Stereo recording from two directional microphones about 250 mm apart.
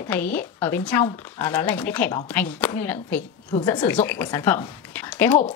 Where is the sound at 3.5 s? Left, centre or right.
Centre.